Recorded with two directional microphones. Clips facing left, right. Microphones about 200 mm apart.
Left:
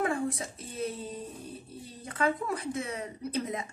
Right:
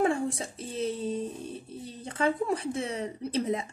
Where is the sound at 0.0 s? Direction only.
30° right (ahead or behind).